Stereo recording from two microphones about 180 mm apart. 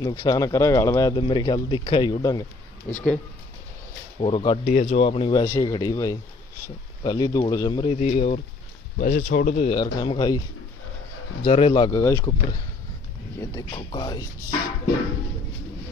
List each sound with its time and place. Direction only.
0.0 s speech: 20° left (ahead or behind)
2.9 s speech: 5° left (ahead or behind)
4.2 s speech: 30° left (ahead or behind)
9.0 s speech: 55° left (ahead or behind)
9.6 s speech: 25° left (ahead or behind)
11.4 s speech: 30° left (ahead or behind)
12.0 s speech: 15° left (ahead or behind)
13.4 s speech: 20° left (ahead or behind)